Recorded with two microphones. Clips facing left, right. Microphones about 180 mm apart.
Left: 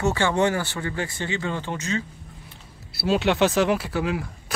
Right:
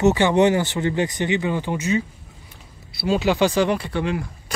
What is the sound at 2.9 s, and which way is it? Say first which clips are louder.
Speech: right 1 dB; centre (ahead or behind).